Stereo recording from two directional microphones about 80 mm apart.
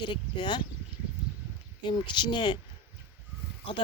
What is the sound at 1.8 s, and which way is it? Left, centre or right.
Speech, left.